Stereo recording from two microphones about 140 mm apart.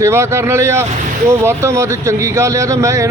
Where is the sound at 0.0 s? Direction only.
20° right (ahead or behind).